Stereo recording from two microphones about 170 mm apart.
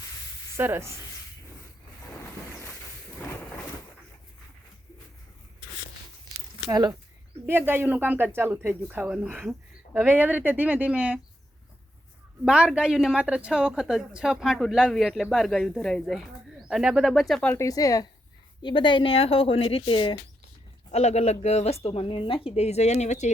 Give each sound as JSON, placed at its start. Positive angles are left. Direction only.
{"t": 0.5, "sound": "speech", "side_deg": -15}
{"t": 6.7, "sound": "speech", "side_deg": -25}
{"t": 7.4, "sound": "speech", "side_deg": -15}
{"t": 12.5, "sound": "a woman's voice", "side_deg": -5}
{"t": 17.5, "sound": "speech", "side_deg": 20}
{"t": 20.9, "sound": "speech", "side_deg": 40}